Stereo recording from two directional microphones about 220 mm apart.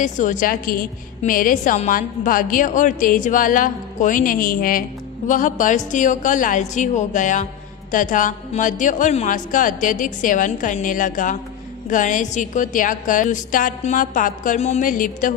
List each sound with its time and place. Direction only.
0.0 s a woman's voice: 35° left (ahead or behind)